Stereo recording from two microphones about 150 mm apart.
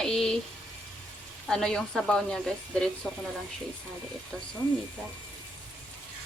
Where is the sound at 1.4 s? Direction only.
5° left (ahead or behind).